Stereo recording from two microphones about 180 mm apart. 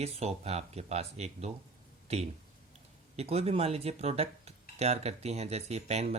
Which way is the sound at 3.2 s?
35° right (ahead or behind).